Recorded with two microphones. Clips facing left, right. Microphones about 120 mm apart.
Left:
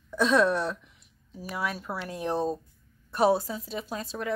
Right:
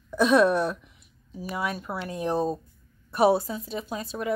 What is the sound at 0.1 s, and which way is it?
Speech, 15° right (ahead or behind).